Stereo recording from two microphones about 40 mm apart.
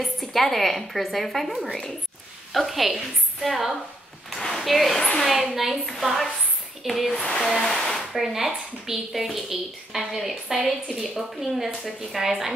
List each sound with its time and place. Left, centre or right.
0.0 s a woman's voice: centre
7.2 s a sound: left
7.5 s speech: centre
8.1 s a woman's voice: centre